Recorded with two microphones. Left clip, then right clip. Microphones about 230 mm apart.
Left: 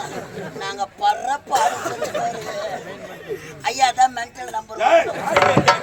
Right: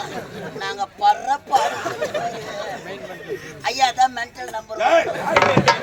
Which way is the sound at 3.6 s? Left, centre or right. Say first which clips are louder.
Left 1 dB; centre.